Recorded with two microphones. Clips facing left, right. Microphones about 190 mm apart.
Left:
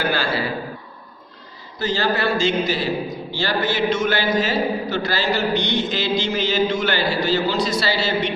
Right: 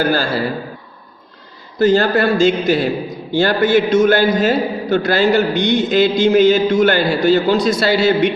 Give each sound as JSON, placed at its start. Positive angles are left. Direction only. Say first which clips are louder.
{"t": 0.0, "sound": "a man's voice", "louder": "right 5 dB", "side_deg": -45}
{"t": 1.8, "sound": "a man's voice", "louder": "right 8 dB", "side_deg": -50}